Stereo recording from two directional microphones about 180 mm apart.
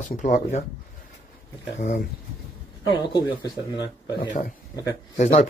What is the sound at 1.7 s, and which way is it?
Speech, 45° left (ahead or behind).